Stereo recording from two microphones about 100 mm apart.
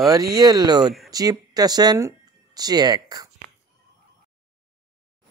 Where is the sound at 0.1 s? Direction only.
40° right (ahead or behind).